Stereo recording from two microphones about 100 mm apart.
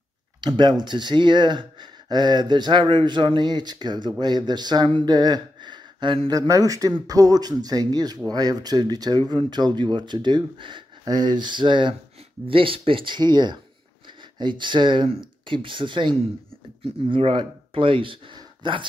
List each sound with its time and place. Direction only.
0.4 s speech: 50° right (ahead or behind)
6.3 s speech: 35° right (ahead or behind); by 18.9 s 50° right (ahead or behind)